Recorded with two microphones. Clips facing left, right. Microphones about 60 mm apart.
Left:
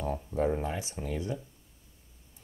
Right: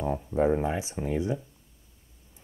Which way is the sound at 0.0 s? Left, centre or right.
Right.